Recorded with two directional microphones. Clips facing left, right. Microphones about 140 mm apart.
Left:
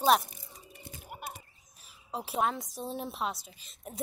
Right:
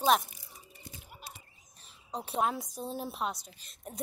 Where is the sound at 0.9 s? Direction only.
55° left (ahead or behind).